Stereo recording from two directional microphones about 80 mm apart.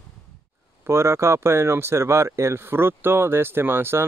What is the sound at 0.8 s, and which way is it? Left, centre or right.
Speech, right.